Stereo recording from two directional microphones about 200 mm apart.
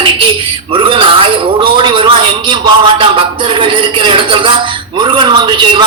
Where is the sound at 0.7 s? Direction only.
25° right (ahead or behind).